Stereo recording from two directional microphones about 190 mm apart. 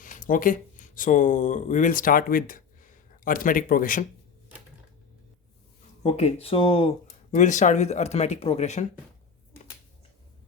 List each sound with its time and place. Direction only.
0.0 s speech: 45° left (ahead or behind)
6.0 s speech: 35° left (ahead or behind)